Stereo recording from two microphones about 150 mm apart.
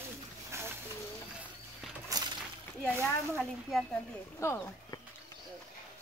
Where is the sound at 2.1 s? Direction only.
25° right (ahead or behind).